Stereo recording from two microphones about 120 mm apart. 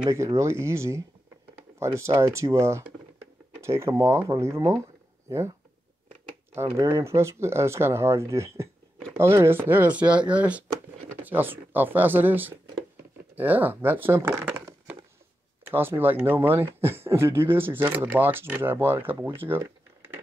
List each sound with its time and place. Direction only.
0.1 s speech: 25° right (ahead or behind)
6.5 s speech: 20° right (ahead or behind)